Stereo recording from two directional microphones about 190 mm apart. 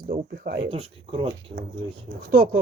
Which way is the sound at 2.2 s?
45° right (ahead or behind).